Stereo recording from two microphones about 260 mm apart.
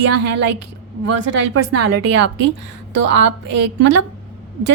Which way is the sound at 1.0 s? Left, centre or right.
Right.